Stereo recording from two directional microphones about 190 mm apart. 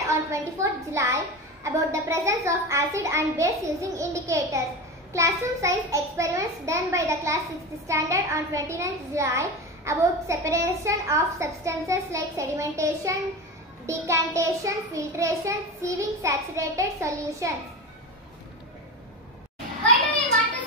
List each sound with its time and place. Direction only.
0.0 s a child's voice: 15° right (ahead or behind)